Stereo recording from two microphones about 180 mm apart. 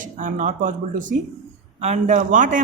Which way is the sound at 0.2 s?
45° right (ahead or behind).